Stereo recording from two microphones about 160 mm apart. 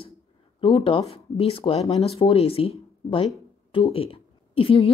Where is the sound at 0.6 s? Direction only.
35° left (ahead or behind).